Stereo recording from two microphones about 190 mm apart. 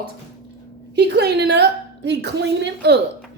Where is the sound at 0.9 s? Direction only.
60° right (ahead or behind).